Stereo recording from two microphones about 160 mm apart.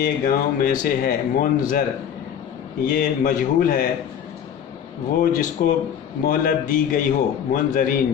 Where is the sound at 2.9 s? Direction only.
55° left (ahead or behind).